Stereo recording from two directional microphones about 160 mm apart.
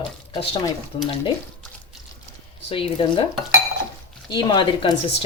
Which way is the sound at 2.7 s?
35° left (ahead or behind).